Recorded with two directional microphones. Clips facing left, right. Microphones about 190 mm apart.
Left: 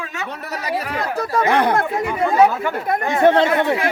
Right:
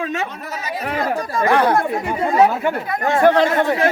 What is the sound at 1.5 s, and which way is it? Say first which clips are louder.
Speech: right 3 dB; 20° left (ahead or behind).